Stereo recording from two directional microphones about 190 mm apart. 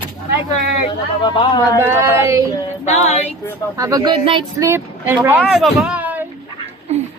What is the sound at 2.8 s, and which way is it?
Female singing, 35° left (ahead or behind).